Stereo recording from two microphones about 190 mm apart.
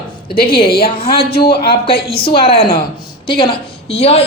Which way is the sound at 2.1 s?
30° left (ahead or behind).